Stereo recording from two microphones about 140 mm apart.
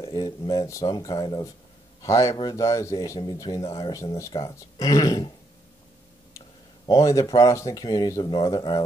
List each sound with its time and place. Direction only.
0.0 s a man's voice: 30° left (ahead or behind)
6.9 s speech: 25° left (ahead or behind)